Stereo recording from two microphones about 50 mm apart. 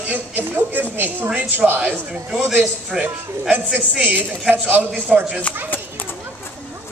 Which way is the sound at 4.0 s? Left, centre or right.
Right.